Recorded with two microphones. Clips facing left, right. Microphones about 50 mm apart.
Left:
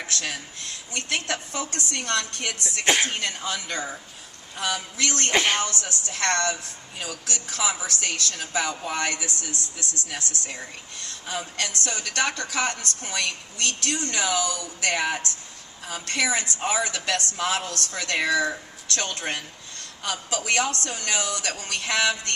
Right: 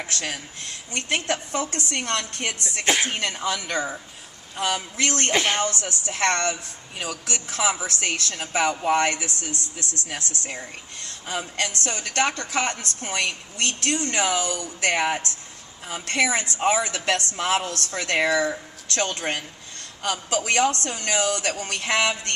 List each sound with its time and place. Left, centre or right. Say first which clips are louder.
0.9 s a woman's voice: right 3 dB; right
2.8 s speech: even; centre
3.1 s a woman's voice: right 3 dB; right
4.5 s a woman's voice: right 3 dB; right
5.3 s speech: left 2 dB; centre
5.5 s a woman's voice: right 2 dB; right
7.6 s a woman's voice: right 3 dB; right